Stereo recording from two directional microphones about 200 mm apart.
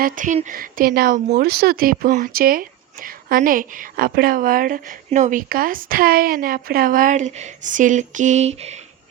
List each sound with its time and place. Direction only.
0.0 s speech: 40° right (ahead or behind)